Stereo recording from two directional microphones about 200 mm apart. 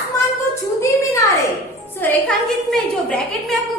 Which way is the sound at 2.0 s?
10° left (ahead or behind).